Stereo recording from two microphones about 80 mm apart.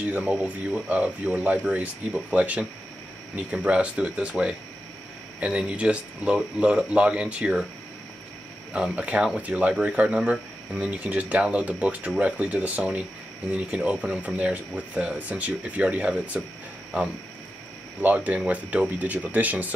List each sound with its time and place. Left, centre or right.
0.0 s speech: centre
8.7 s speech: centre
18.0 s speech: centre